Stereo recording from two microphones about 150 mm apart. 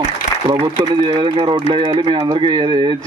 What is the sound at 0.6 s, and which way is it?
A man's voice, 35° right (ahead or behind).